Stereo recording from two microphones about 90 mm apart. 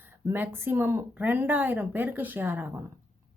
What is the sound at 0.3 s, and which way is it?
A woman's voice, 25° right (ahead or behind).